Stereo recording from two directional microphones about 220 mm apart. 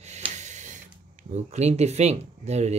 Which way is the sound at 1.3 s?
30° right (ahead or behind).